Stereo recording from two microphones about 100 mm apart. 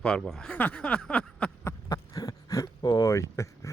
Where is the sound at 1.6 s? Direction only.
30° left (ahead or behind).